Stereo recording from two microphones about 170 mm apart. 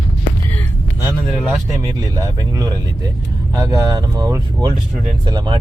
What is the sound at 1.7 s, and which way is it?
Speech, 20° right (ahead or behind).